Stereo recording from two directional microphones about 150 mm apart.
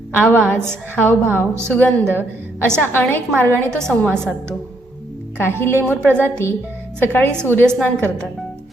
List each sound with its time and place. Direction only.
0.2 s a woman's voice: 15° left (ahead or behind)